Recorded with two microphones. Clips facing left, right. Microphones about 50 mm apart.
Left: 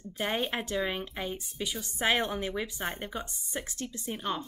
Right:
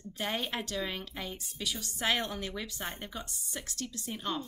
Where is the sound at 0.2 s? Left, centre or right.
Left.